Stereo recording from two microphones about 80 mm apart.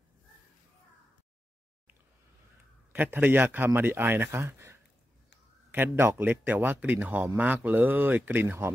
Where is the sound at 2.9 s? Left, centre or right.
Right.